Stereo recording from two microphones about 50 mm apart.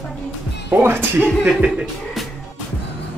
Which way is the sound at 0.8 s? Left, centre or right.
Right.